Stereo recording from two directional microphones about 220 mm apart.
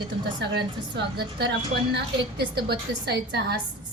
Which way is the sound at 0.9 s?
45° right (ahead or behind).